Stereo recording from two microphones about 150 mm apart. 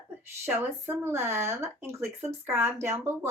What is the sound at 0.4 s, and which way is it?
Speech, 15° right (ahead or behind).